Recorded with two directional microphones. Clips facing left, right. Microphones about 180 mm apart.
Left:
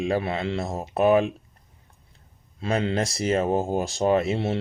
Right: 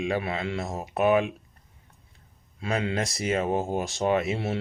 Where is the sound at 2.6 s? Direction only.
35° left (ahead or behind).